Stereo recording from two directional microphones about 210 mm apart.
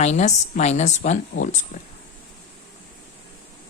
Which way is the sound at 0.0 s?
30° left (ahead or behind).